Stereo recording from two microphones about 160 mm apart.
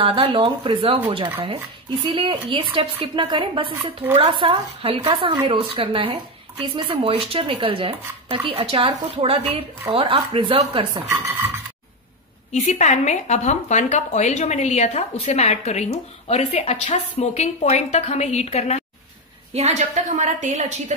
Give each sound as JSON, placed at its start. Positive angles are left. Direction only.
{"t": 0.0, "sound": "speech", "side_deg": -35}
{"t": 11.1, "sound": "cutlery", "side_deg": -15}
{"t": 12.5, "sound": "speech", "side_deg": 50}
{"t": 19.5, "sound": "a woman's voice", "side_deg": -45}